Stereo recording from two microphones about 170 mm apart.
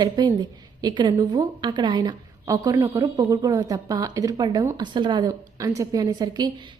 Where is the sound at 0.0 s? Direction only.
25° right (ahead or behind).